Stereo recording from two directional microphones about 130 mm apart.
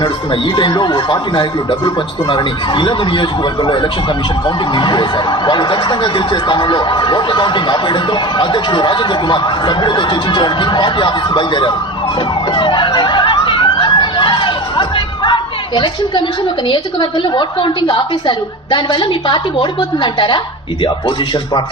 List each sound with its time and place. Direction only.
0.5 s speech: 35° left (ahead or behind)
12.5 s emergency vehicle: 40° left (ahead or behind)
16.6 s speech: 35° left (ahead or behind)